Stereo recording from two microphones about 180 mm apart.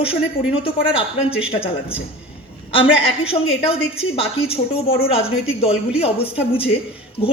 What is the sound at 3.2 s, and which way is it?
A woman's voice, 30° left (ahead or behind).